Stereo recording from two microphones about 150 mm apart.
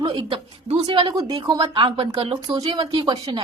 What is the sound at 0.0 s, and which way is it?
A woman's voice, 35° right (ahead or behind).